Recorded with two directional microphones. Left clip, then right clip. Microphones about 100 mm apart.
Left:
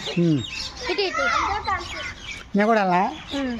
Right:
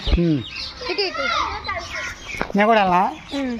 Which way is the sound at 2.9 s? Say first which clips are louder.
Right 3 dB; centre (ahead or behind).